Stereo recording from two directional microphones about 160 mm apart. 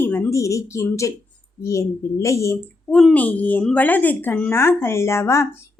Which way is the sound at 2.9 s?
5° left (ahead or behind).